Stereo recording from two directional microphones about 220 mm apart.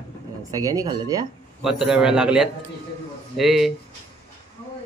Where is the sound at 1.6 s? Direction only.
Centre (ahead or behind).